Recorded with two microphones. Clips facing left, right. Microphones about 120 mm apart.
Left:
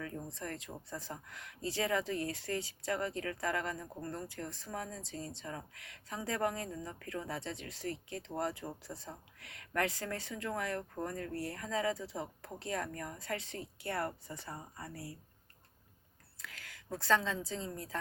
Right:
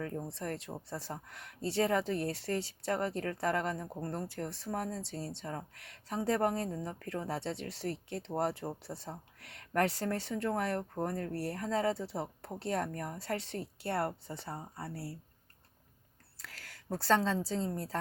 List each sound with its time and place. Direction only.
0.0 s speech: 35° right (ahead or behind)
16.4 s a woman's voice: 35° right (ahead or behind)